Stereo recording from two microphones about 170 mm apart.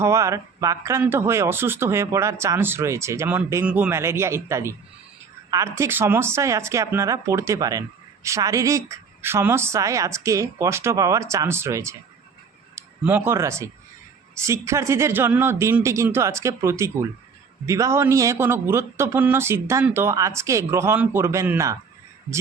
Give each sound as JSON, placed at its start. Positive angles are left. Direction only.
{"t": 0.0, "sound": "speech", "side_deg": -15}